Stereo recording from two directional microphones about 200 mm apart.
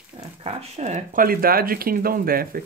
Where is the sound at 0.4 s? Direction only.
30° right (ahead or behind).